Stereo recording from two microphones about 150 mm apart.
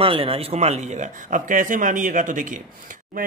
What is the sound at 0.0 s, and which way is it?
A man's voice, 40° right (ahead or behind).